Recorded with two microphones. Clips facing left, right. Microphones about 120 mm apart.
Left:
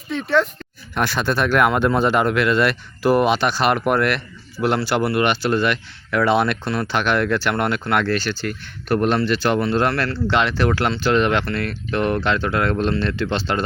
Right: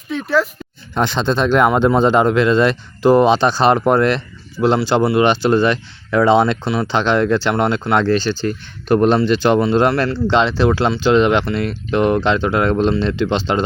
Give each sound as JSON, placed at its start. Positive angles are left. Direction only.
{"t": 0.1, "sound": "speech", "side_deg": 0}
{"t": 0.9, "sound": "speech", "side_deg": -20}